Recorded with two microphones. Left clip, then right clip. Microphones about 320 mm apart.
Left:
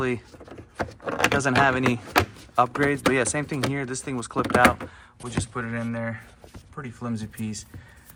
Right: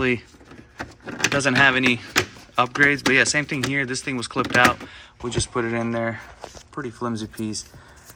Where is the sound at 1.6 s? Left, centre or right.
Centre.